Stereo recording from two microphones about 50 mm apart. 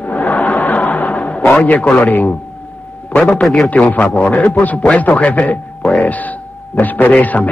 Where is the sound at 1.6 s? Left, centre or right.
Left.